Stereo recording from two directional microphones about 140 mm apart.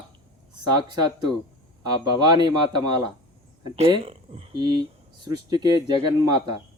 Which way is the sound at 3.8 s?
45° right (ahead or behind).